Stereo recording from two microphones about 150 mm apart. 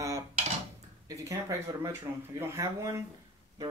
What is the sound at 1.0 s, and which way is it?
Speech, 20° right (ahead or behind).